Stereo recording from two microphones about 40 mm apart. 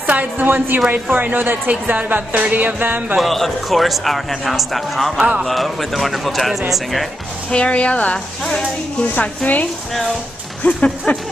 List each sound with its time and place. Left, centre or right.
0.0 s a sound: right
0.7 s music: right
1.7 s a woman's voice: right
2.4 s music: right
3.2 s speech: centre
5.1 s speech: right
5.5 s speech: centre
7.5 s speech: left